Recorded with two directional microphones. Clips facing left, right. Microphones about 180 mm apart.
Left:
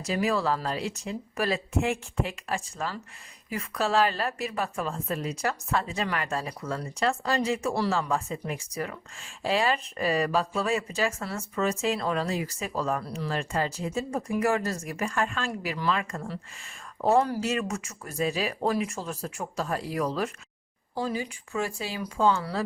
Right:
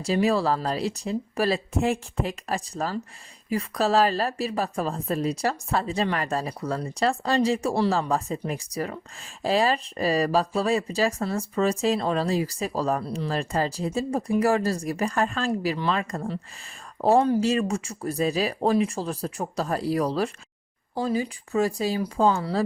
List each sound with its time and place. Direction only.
0.0 s speech: 30° right (ahead or behind)